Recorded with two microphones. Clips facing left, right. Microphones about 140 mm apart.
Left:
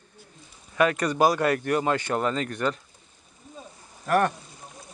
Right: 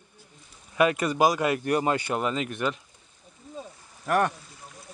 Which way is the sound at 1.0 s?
5° right (ahead or behind).